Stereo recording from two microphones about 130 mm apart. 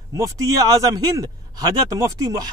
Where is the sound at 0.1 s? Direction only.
25° right (ahead or behind).